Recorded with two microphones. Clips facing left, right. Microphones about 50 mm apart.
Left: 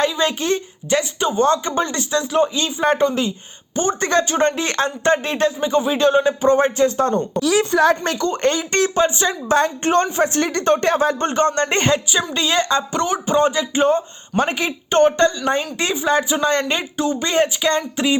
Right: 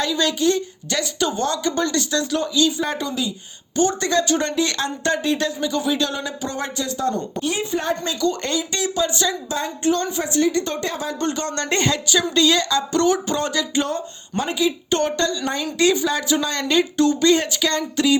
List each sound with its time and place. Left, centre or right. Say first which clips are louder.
0.0 s speech: left 1 dB; left
2.8 s speech: left 7 dB; left
3.8 s speech: left 1 dB; left
7.3 s a woman's voice: left 7 dB; left
8.2 s speech: left 3 dB; left
9.0 s speech: left 3 dB; left
9.5 s a woman's voice: left 8 dB; left
14.3 s a woman's voice: left 2 dB; left
14.8 s speech: left 6 dB; left
17.0 s speech: right 1 dB; centre
17.2 s speech: even; left